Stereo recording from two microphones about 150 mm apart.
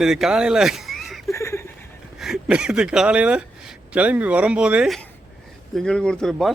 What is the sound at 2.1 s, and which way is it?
Speech, centre (ahead or behind).